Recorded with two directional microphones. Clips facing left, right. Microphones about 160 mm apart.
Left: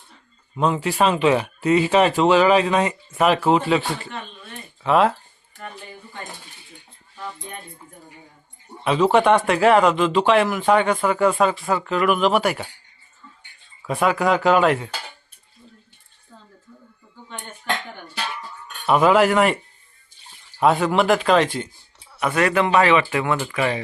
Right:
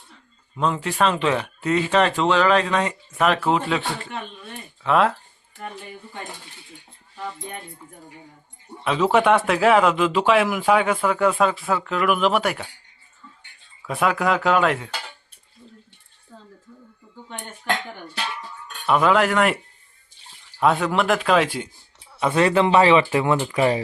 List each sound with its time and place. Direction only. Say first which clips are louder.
0.5 s speech: left 3 dB; 5° left (ahead or behind)
8.8 s speech: left 2 dB; centre (ahead or behind)
13.8 s speech: left 2 dB; centre (ahead or behind)
18.9 s speech: left 2 dB; 5° left (ahead or behind)
20.6 s speech: left 2 dB; centre (ahead or behind)
22.2 s a man's voice: right 1 dB; 25° right (ahead or behind)